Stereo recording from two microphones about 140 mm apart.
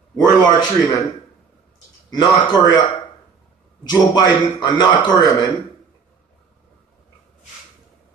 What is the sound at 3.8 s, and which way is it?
A man's voice, 30° left (ahead or behind).